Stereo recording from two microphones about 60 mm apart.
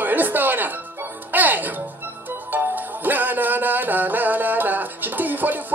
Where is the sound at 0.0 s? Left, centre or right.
Right.